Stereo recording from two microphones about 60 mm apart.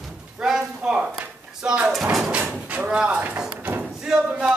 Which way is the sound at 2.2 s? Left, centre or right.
Right.